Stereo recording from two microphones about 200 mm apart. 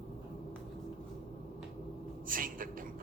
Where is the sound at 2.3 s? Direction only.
45° right (ahead or behind).